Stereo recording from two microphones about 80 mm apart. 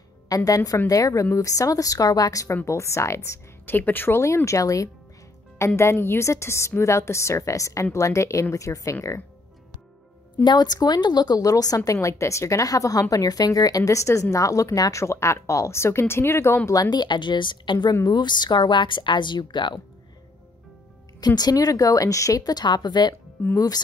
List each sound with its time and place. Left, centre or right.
0.5 s a woman's voice: left
2.5 s speech: left
3.3 s speech: left
4.5 s a woman's voice: left
5.8 s speech: left
10.4 s a woman's voice: left
16.9 s speech: left
18.0 s speech: left
21.4 s a woman's voice: left
22.4 s a woman's voice: left